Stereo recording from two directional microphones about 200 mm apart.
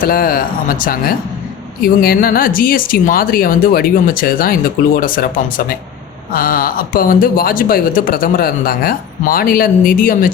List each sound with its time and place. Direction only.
0.0 s speech: 45° left (ahead or behind)